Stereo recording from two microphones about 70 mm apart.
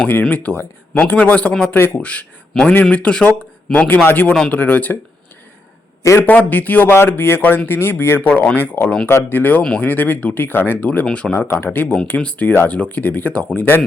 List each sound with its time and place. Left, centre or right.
0.1 s a man's voice: left
1.7 s speech: left
2.0 s a man's voice: centre
3.8 s speech: left
6.1 s a man's voice: left
11.3 s speech: left